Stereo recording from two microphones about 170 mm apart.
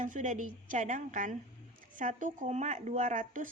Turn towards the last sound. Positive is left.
turn(degrees=-50)  # may be behind; listen again after turning